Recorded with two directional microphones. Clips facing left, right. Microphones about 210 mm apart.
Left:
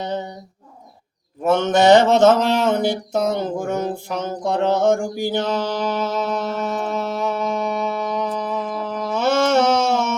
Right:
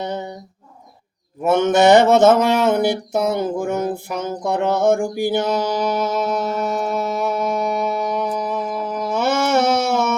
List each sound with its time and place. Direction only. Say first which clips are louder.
1.5 s mantra: right 1 dB; 10° right (ahead or behind)